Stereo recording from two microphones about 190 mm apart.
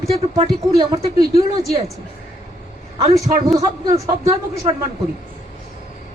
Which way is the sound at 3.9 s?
15° right (ahead or behind).